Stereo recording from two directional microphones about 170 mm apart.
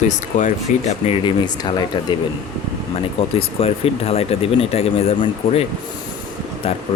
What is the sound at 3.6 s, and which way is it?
Speech, 35° left (ahead or behind).